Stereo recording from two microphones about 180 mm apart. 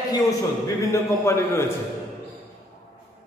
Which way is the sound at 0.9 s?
15° left (ahead or behind).